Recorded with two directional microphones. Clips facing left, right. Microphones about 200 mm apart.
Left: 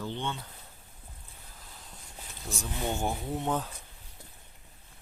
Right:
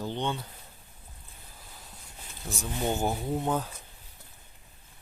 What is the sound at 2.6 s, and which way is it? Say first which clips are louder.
Speech: right 3 dB; 5° right (ahead or behind).